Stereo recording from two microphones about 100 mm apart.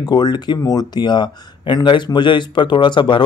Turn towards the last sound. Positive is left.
turn(degrees=50)  # may be behind; listen again after turning